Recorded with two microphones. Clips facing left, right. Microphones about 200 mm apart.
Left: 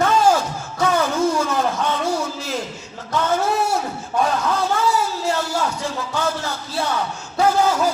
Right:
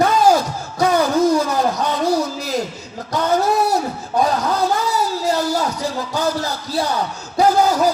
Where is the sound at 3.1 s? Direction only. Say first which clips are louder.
Right 3 dB; 35° right (ahead or behind).